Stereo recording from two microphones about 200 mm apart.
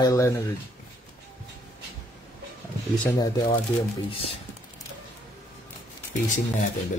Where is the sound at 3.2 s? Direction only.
20° left (ahead or behind).